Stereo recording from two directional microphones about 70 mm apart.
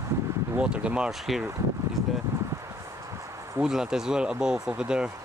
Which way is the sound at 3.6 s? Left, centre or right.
Centre.